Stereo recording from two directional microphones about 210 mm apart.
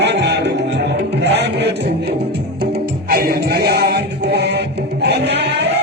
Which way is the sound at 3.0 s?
45° right (ahead or behind).